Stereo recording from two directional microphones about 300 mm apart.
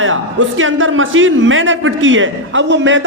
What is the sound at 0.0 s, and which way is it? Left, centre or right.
A man's voice, right.